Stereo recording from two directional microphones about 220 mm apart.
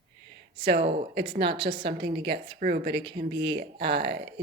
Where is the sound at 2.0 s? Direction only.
45° right (ahead or behind).